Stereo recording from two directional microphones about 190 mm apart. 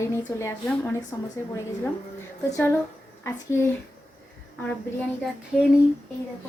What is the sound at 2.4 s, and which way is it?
Speech, 15° left (ahead or behind).